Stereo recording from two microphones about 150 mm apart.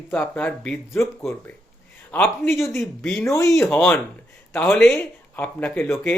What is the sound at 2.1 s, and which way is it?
Speech, 10° left (ahead or behind).